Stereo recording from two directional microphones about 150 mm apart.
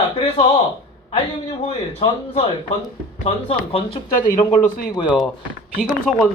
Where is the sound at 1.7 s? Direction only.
40° left (ahead or behind).